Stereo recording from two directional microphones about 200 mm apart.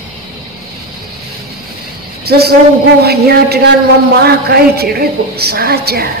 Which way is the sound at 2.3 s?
50° right (ahead or behind).